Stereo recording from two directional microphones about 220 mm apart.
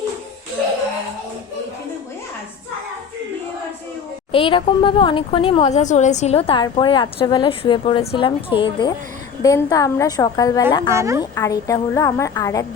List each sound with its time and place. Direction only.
4.3 s a woman's voice: 25° left (ahead or behind)
10.9 s a woman's voice: 15° right (ahead or behind)
11.2 s a woman's voice: 15° left (ahead or behind)